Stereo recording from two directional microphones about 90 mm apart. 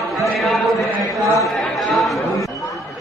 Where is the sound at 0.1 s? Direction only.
Centre (ahead or behind).